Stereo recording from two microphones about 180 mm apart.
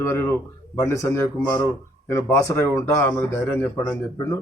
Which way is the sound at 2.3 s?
15° left (ahead or behind).